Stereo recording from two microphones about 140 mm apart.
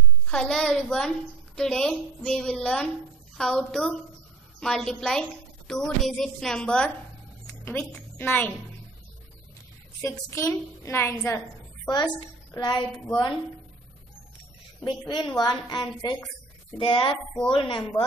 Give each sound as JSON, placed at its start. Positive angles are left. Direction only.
{"t": 0.3, "sound": "a woman's voice", "side_deg": 5}
{"t": 10.0, "sound": "a woman's voice", "side_deg": 20}
{"t": 12.5, "sound": "a woman's voice", "side_deg": 30}
{"t": 14.9, "sound": "a woman's voice", "side_deg": 30}